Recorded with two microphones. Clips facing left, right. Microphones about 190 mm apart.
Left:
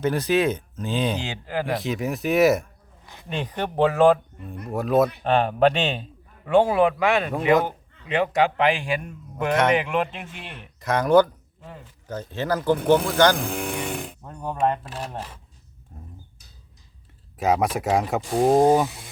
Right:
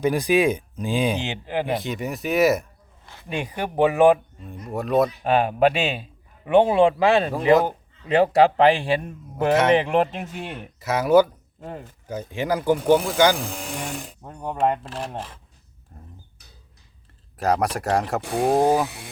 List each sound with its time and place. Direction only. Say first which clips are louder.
0.0 s speech: right 2 dB; 10° right (ahead or behind)
1.7 s speech: left 1 dB; centre (ahead or behind)
3.2 s speech: even; 10° right (ahead or behind)
4.7 s speech: left 1 dB; centre (ahead or behind)
6.5 s a man's voice: right 2 dB; 20° right (ahead or behind); by 10.7 s 45° right (ahead or behind)
10.8 s speech: right 1 dB; 5° right (ahead or behind)
11.6 s speech: right 7 dB; 45° right (ahead or behind)
12.0 s speech: right 1 dB; 10° right (ahead or behind)
13.3 s a sound: left 3 dB; 60° left (ahead or behind)
14.2 s speech: right 2 dB; 15° right (ahead or behind)
15.9 s speech: left 2 dB; centre (ahead or behind)
17.3 s speech: left 1 dB; centre (ahead or behind)